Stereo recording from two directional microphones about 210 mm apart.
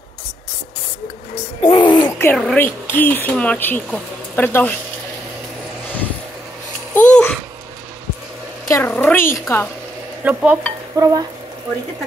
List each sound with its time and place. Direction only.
1.7 s speech: 20° left (ahead or behind)
7.0 s babbling: 5° left (ahead or behind)
8.6 s a woman's voice: 10° left (ahead or behind)
10.2 s stir: 5° right (ahead or behind)
11.0 s stir: 15° right (ahead or behind)